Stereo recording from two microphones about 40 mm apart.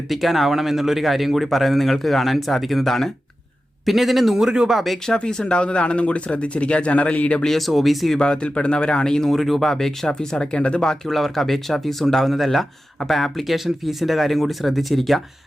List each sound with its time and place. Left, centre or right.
0.1 s speech: centre
4.4 s speech: centre
5.3 s speech: left
7.4 s speech: centre
8.2 s speech: left
9.3 s speech: centre; by 10.9 s left
11.0 s speech: centre